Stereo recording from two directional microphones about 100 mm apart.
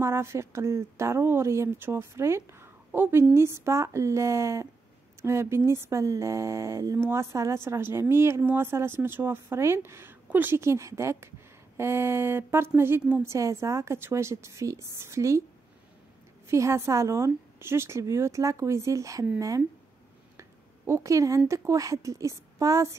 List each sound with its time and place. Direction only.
0.0 s speech: 25° right (ahead or behind)
16.4 s speech: 30° right (ahead or behind)
20.3 s a sound: 30° right (ahead or behind)
21.5 s speech: 30° right (ahead or behind)